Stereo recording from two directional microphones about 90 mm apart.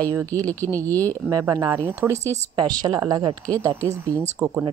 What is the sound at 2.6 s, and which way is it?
Speech, 50° right (ahead or behind).